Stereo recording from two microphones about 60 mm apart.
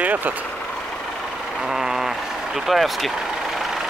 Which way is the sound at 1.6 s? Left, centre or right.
Centre.